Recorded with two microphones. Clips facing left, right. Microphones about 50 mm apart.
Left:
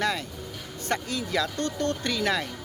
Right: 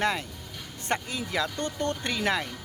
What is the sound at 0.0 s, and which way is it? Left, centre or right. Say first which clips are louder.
Speech: even; right.